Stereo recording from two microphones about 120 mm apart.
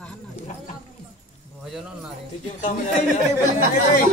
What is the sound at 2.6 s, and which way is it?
Speech, 90° left.